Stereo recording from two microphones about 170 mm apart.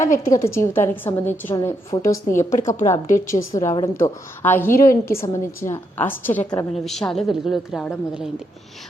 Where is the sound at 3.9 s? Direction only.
15° left (ahead or behind).